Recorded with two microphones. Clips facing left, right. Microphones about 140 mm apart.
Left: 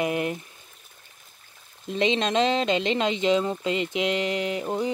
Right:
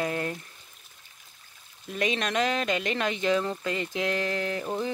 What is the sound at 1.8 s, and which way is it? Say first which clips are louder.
Speech: left 5 dB; 25° left (ahead or behind).